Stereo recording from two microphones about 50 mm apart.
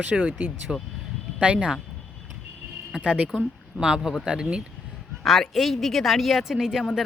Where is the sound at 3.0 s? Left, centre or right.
Right.